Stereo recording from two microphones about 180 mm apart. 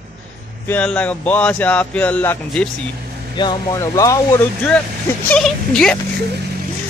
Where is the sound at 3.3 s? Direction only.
25° left (ahead or behind); by 5.9 s 5° left (ahead or behind).